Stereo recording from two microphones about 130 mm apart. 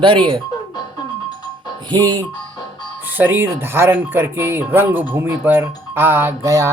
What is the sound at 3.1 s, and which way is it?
Speech, 15° right (ahead or behind).